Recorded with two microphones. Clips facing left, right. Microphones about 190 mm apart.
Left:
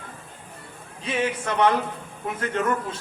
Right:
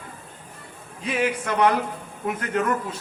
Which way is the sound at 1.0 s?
30° left (ahead or behind).